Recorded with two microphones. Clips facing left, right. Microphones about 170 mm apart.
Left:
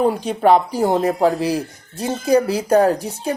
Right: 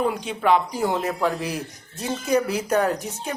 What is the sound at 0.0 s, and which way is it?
Speech, 40° left (ahead or behind).